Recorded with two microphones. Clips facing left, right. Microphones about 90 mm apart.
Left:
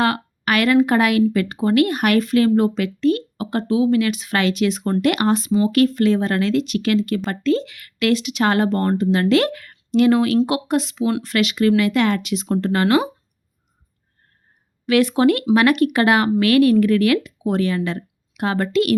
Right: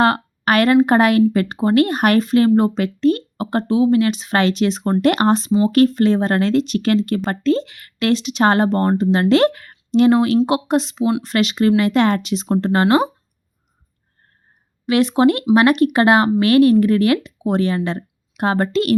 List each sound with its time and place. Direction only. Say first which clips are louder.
0.0 s speech: right 4 dB; 35° right (ahead or behind)
14.8 s speech: right 1 dB; 25° right (ahead or behind)